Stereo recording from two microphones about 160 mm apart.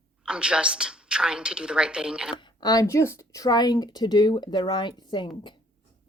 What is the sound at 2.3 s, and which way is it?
Speech, 25° left (ahead or behind).